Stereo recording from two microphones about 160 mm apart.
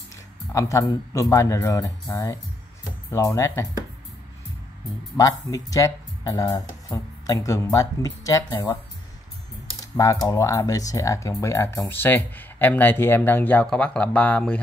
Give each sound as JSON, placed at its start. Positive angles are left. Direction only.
{"t": 0.5, "sound": "speech", "side_deg": 20}
{"t": 5.1, "sound": "speech", "side_deg": 20}
{"t": 9.9, "sound": "speech", "side_deg": 20}